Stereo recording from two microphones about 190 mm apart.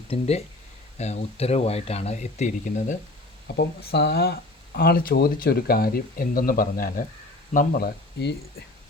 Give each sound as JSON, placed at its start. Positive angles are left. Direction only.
{"t": 0.1, "sound": "speech", "side_deg": 35}
{"t": 3.4, "sound": "speech", "side_deg": 60}